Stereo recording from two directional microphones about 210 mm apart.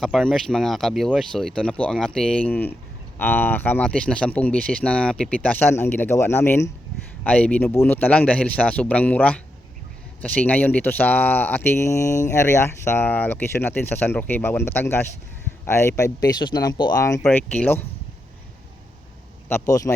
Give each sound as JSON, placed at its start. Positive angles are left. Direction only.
{"t": 0.0, "sound": "speech", "side_deg": 0}
{"t": 19.5, "sound": "speech", "side_deg": 15}